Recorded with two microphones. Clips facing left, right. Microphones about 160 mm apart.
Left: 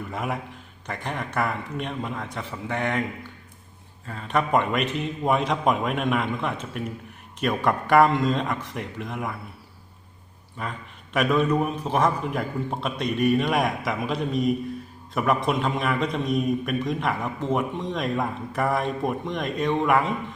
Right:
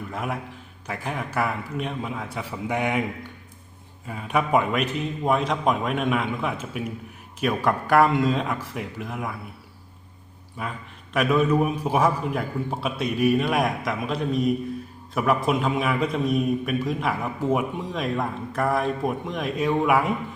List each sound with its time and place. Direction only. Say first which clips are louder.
0.1 s a man's voice: even; centre (ahead or behind)
4.0 s a man's voice: even; 10° right (ahead or behind)
10.6 s a man's voice: right 1 dB; centre (ahead or behind)